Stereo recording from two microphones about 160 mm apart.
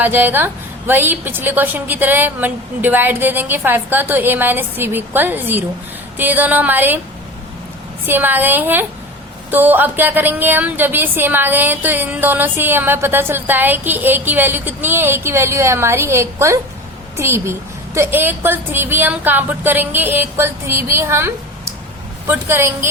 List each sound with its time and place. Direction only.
0.0 s a woman's voice: 10° right (ahead or behind)
8.0 s a woman's voice: 10° right (ahead or behind)